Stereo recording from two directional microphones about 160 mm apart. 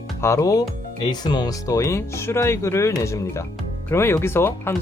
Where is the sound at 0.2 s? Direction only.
20° left (ahead or behind).